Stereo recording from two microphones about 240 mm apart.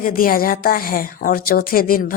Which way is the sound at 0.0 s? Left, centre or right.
Left.